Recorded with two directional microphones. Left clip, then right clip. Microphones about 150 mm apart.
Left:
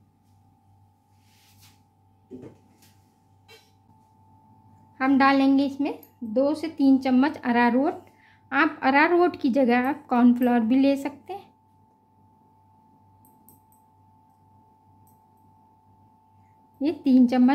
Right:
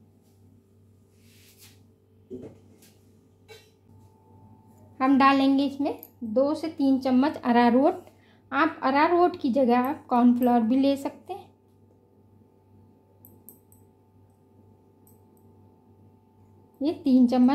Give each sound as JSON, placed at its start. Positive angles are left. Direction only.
{"t": 4.9, "sound": "a woman's voice", "side_deg": 0}
{"t": 5.5, "sound": "speech", "side_deg": 15}
{"t": 8.5, "sound": "a woman's voice", "side_deg": 20}
{"t": 16.8, "sound": "a woman's voice", "side_deg": 20}